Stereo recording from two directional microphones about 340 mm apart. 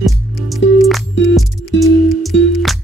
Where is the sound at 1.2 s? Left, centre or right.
Left.